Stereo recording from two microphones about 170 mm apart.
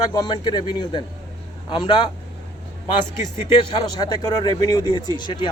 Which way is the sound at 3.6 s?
25° left (ahead or behind).